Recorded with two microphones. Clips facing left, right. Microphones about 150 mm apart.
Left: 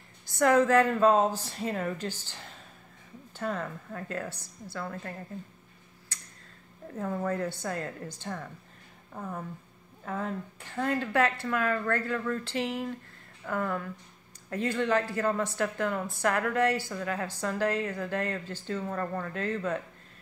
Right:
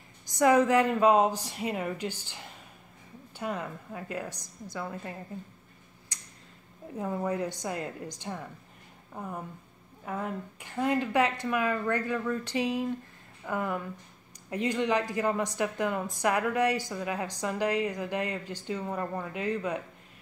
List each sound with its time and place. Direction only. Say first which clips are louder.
0.3 s a woman's voice: even; 15° right (ahead or behind)
6.1 s clicking: left 2 dB; 15° right (ahead or behind)
7.0 s a woman's voice: even; 15° right (ahead or behind)